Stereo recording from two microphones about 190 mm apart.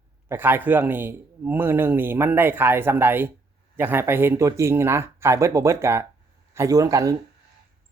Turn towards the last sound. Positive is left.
turn(degrees=-20)  # may be behind; listen again after turning